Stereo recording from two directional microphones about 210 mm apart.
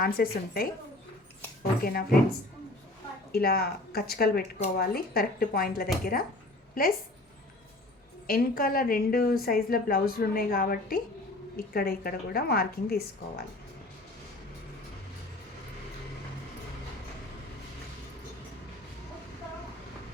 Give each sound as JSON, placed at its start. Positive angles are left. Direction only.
{"t": 0.0, "sound": "speech", "side_deg": 45}
{"t": 1.8, "sound": "speech", "side_deg": 45}
{"t": 3.3, "sound": "speech", "side_deg": 45}
{"t": 8.3, "sound": "speech", "side_deg": 45}